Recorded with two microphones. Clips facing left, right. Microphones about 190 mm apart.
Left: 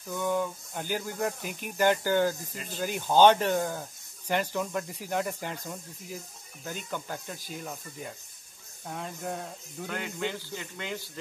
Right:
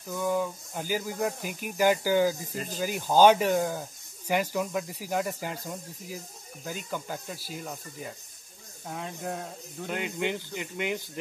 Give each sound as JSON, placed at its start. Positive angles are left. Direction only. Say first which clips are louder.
{"t": 0.1, "sound": "speech", "louder": "right 1 dB", "side_deg": 0}
{"t": 2.5, "sound": "speech", "louder": "right 5 dB", "side_deg": -40}
{"t": 2.8, "sound": "speech", "louder": "even", "side_deg": -5}
{"t": 9.8, "sound": "speech", "louder": "right 3 dB", "side_deg": -20}